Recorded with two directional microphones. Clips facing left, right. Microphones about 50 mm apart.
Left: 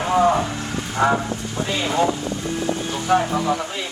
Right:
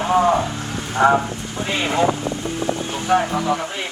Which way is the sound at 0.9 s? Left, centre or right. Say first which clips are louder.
Right 4 dB; right.